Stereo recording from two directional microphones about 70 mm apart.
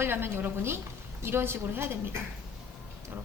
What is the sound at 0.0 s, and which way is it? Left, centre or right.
A woman's voice, right.